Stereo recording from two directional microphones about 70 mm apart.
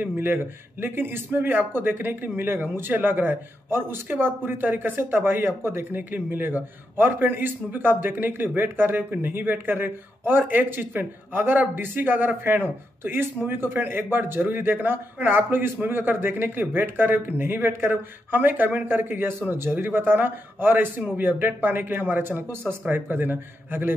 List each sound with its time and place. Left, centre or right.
0.0 s speech: right